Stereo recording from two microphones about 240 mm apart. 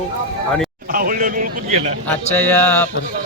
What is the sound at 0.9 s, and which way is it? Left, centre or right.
Speech, right.